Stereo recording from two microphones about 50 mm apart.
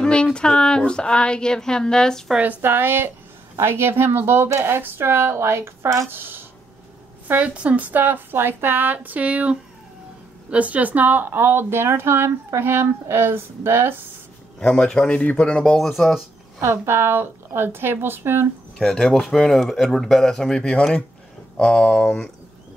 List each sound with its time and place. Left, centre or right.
0.0 s speech: centre
2.6 s speech: right
6.0 s speech: right
7.4 s a woman's voice: right
14.6 s speech: centre
16.6 s speech: right
18.8 s speech: centre